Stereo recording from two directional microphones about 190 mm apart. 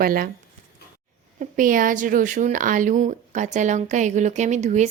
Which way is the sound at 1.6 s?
45° right (ahead or behind).